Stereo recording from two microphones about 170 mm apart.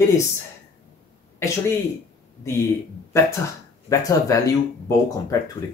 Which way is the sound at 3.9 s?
20° left (ahead or behind).